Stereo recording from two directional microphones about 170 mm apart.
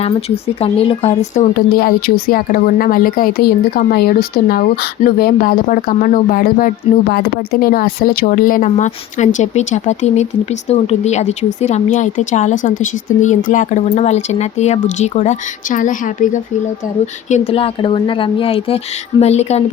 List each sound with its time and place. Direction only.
0.0 s speech: 35° left (ahead or behind)
1.5 s speech: 60° left (ahead or behind); by 19.6 s 40° left (ahead or behind)